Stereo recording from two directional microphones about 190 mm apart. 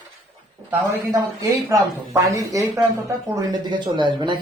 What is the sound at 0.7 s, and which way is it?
Speech, 15° right (ahead or behind).